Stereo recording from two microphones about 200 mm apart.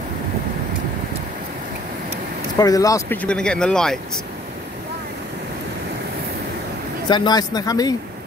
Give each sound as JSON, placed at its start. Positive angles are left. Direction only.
{"t": 2.6, "sound": "speech", "side_deg": 15}
{"t": 7.1, "sound": "speech", "side_deg": 20}